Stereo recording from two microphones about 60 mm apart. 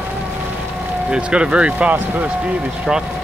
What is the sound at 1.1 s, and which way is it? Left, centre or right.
Speech, centre.